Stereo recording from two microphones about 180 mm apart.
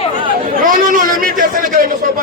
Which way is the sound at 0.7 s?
50° right (ahead or behind).